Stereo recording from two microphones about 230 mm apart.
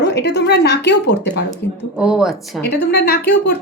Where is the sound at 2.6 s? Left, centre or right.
Left.